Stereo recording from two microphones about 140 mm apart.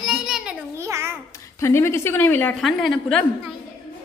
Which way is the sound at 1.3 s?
20° left (ahead or behind).